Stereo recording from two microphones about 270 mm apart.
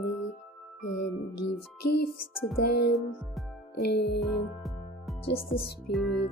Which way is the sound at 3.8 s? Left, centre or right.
Left.